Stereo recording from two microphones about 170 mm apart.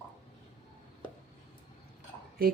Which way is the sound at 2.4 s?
70° right (ahead or behind).